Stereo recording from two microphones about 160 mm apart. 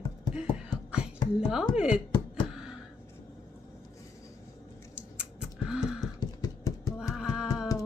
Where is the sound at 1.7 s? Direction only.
5° right (ahead or behind).